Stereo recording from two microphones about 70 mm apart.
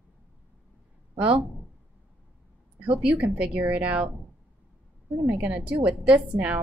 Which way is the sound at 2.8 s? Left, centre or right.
Centre.